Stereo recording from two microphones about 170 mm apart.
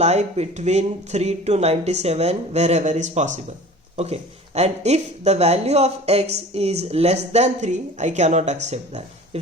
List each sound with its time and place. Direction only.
0.0 s speech: 40° right (ahead or behind)